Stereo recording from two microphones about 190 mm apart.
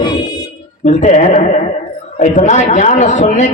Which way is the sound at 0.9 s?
40° left (ahead or behind).